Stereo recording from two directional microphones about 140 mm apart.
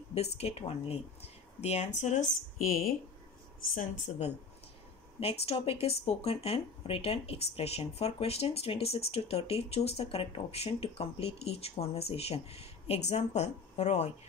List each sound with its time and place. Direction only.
0.1 s speech: 50° left (ahead or behind); by 3.0 s 90° left
5.2 s speech: 45° left (ahead or behind)